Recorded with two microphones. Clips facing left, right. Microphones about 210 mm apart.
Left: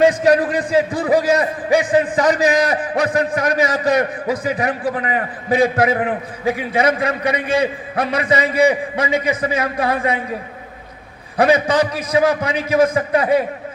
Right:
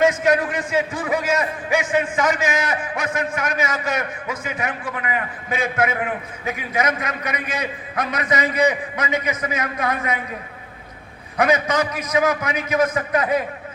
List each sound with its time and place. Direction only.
0.0 s a man's voice: 35° left (ahead or behind)
11.3 s a man's voice: 30° left (ahead or behind)